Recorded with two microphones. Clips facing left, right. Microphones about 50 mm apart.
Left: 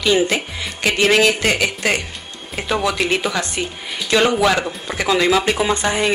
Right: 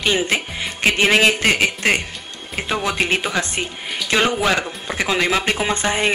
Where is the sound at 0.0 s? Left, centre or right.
Right.